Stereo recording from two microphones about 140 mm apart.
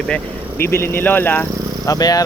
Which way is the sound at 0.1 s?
15° left (ahead or behind).